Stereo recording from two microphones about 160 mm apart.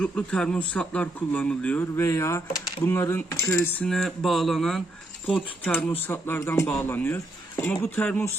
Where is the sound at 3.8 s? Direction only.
Centre (ahead or behind).